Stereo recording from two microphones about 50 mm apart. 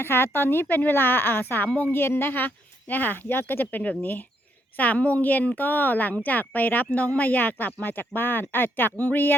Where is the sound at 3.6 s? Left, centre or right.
Left.